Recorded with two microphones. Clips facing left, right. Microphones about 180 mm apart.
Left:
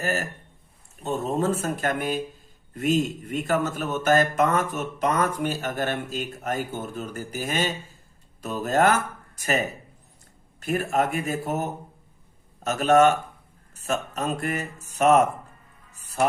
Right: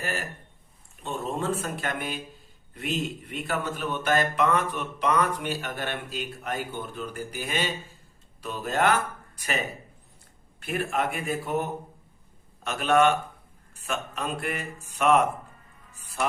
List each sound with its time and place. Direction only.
0.0 s a man's voice: 45° left (ahead or behind)
15.9 s music: 40° left (ahead or behind)